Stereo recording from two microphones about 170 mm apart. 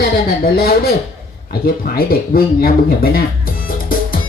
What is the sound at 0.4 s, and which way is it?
Speech, 65° left (ahead or behind).